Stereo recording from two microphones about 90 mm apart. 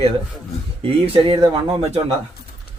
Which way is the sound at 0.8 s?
75° right (ahead or behind).